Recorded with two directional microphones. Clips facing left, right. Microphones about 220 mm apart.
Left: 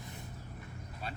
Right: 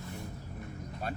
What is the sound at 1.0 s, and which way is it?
Speech, 50° right (ahead or behind).